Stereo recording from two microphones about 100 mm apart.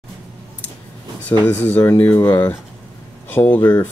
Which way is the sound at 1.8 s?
25° left (ahead or behind).